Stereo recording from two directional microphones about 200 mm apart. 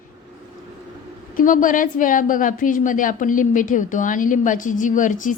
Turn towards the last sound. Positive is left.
turn(degrees=40)  # may be behind; listen again after turning